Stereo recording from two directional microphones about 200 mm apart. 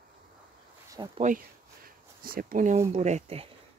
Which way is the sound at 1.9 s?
45° right (ahead or behind).